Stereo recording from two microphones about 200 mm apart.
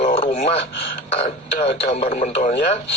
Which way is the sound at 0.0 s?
30° left (ahead or behind).